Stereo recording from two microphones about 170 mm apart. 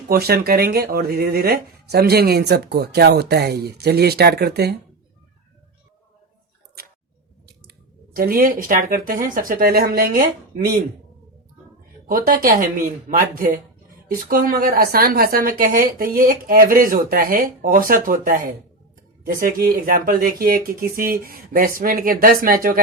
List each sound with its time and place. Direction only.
0.1 s speech: 65° right (ahead or behind)
7.4 s speech: 65° right (ahead or behind)
12.0 s a woman's voice: 55° right (ahead or behind)